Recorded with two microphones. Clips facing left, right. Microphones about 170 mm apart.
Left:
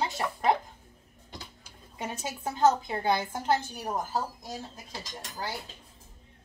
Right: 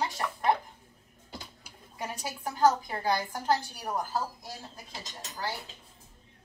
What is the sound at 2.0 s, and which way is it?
A woman's voice, 25° left (ahead or behind).